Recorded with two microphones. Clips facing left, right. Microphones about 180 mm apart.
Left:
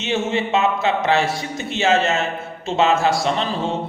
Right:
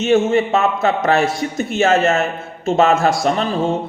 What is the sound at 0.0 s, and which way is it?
A man's voice, 50° right (ahead or behind).